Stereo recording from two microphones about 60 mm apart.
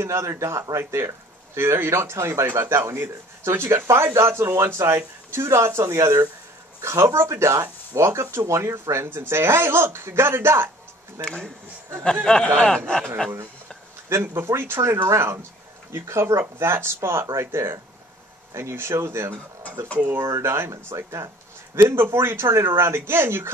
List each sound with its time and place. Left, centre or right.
0.0 s speech: right
11.1 s speech: centre
14.2 s speech: right
20.7 s speech: right
21.9 s speech: right